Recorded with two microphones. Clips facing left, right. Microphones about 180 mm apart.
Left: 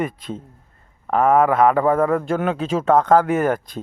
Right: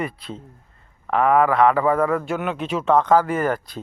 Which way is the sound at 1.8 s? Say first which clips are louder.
Left 2 dB; 45° left (ahead or behind).